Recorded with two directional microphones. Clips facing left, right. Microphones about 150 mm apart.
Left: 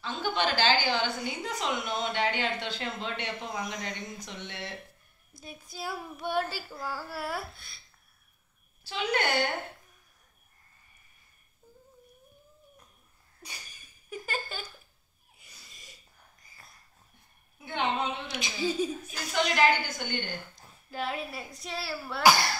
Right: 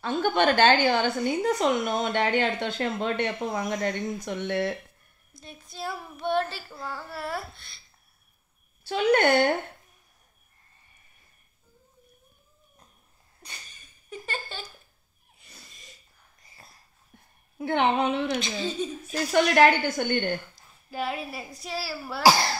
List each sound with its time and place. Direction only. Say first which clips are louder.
0.0 s a woman's voice: right 7 dB; 55° right (ahead or behind)
5.4 s child singing: right 3 dB; 5° left (ahead or behind)
8.8 s a woman's voice: right 8 dB; 55° right (ahead or behind)
14.1 s a sound: even; 5° left (ahead or behind)
16.4 s dog: right 4 dB; 30° right (ahead or behind)
17.6 s a woman's voice: right 7 dB; 65° right (ahead or behind)
18.4 s speech: even; 10° left (ahead or behind)
19.3 s a woman's voice: right 6 dB; 60° right (ahead or behind)
20.9 s child singing: right 3 dB; 5° right (ahead or behind)
22.2 s speech: right 3 dB; 30° right (ahead or behind)